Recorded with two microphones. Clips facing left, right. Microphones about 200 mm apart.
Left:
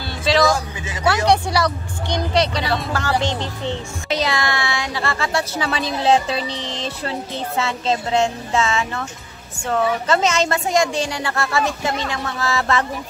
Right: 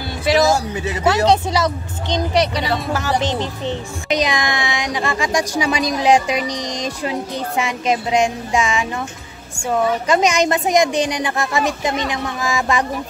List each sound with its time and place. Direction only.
0.2 s music: 20° right (ahead or behind)
1.0 s a woman's voice: 20° right (ahead or behind)